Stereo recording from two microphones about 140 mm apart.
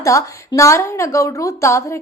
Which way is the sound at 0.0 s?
20° left (ahead or behind).